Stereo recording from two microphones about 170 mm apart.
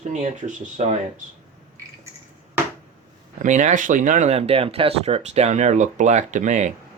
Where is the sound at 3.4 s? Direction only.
45° right (ahead or behind).